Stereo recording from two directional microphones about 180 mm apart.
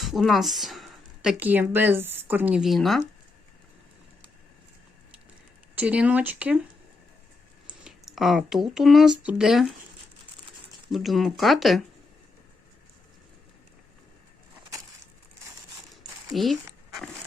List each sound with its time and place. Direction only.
0.0 s speech: centre (ahead or behind)
5.7 s speech: 10° right (ahead or behind)
7.9 s speech: centre (ahead or behind)
10.9 s speech: centre (ahead or behind)
16.3 s speech: centre (ahead or behind)